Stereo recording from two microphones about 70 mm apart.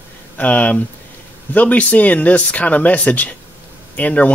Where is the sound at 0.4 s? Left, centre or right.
Left.